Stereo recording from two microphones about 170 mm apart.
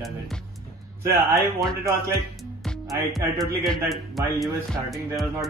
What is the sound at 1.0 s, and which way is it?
Speech, 20° right (ahead or behind).